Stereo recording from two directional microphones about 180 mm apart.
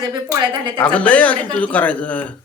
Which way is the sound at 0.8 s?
5° left (ahead or behind).